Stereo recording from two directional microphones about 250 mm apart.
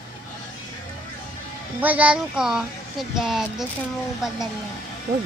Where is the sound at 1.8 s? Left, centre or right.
Centre.